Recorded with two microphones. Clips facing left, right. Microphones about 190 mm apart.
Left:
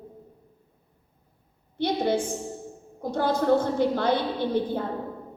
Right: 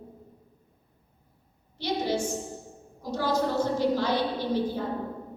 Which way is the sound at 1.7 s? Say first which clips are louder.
Left 4 dB; 55° left (ahead or behind).